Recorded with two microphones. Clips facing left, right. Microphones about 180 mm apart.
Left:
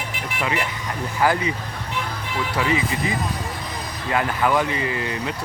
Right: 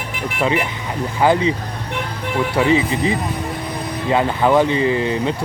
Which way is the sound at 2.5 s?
25° right (ahead or behind).